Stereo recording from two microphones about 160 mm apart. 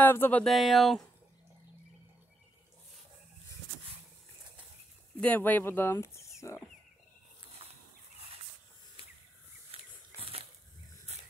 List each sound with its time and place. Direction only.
0.0 s speech: 10° left (ahead or behind)
5.2 s speech: 10° left (ahead or behind)
9.7 s a sound: 35° right (ahead or behind)